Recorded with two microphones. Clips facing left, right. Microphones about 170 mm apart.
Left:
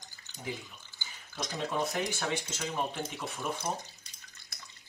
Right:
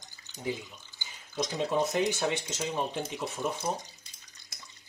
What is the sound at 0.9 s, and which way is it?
Speech, 20° right (ahead or behind).